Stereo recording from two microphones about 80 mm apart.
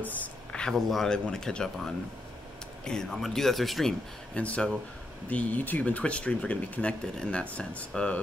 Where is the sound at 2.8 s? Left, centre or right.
Centre.